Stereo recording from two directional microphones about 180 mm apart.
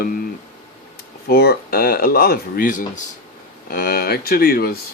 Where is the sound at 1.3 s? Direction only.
60° left (ahead or behind).